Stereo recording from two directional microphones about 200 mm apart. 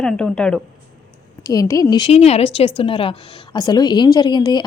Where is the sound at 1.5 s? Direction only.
15° left (ahead or behind).